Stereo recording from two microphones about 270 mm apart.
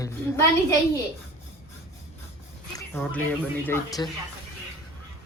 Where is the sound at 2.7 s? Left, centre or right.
Centre.